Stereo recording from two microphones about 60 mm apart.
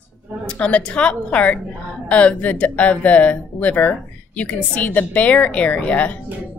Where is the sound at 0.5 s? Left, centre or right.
Centre.